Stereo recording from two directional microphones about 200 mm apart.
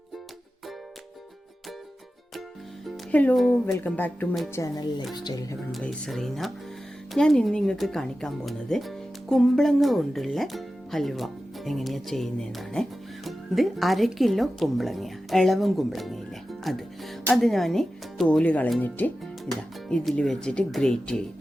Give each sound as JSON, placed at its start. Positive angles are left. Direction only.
{"t": 2.8, "sound": "speech", "side_deg": 5}
{"t": 5.7, "sound": "speech", "side_deg": 0}